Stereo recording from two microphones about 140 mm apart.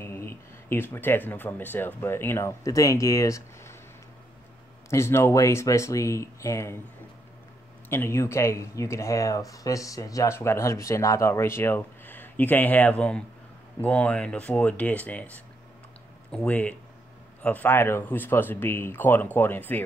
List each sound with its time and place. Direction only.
0.0 s speech: 15° left (ahead or behind)
4.8 s speech: 20° left (ahead or behind)
7.9 s speech: 20° left (ahead or behind)
16.3 s speech: 10° left (ahead or behind)